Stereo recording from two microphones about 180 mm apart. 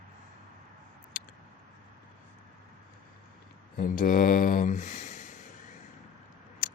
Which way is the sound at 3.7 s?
50° left (ahead or behind).